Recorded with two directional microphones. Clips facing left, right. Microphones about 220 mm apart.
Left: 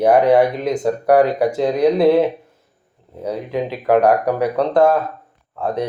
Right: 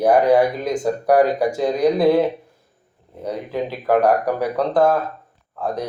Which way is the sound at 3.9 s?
5° right (ahead or behind).